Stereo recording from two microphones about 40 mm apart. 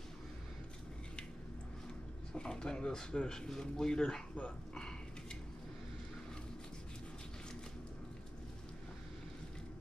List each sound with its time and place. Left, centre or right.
2.3 s speech: centre